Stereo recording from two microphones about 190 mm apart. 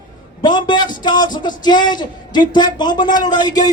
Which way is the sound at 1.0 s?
25° left (ahead or behind).